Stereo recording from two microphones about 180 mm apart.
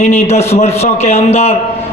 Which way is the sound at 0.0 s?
40° left (ahead or behind).